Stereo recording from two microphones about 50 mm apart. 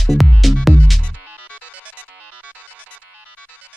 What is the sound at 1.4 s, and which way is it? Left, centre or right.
Music, right.